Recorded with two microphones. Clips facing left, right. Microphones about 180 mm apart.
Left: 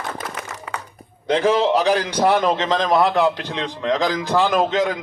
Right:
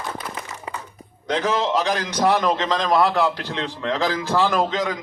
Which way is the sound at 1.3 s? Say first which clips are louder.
Left 5 dB; 30° left (ahead or behind).